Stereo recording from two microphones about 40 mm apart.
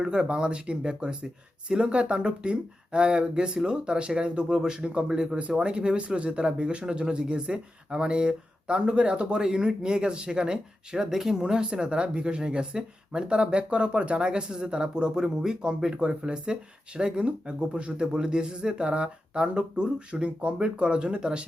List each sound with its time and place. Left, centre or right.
0.0 s speech: right
16.0 s speech: right